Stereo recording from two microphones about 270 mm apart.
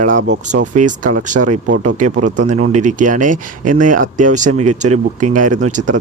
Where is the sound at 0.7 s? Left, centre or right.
Right.